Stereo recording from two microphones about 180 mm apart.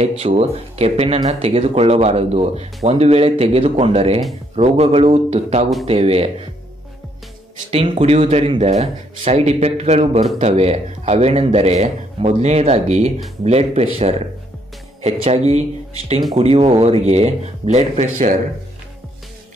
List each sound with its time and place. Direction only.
0.2 s speech: 35° right (ahead or behind)
7.7 s speech: 30° right (ahead or behind)